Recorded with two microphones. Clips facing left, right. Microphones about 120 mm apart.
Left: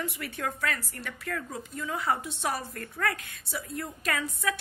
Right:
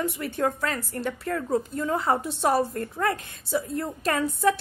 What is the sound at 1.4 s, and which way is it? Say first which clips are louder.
A woman's voice: right 10 dB; 40° right (ahead or behind).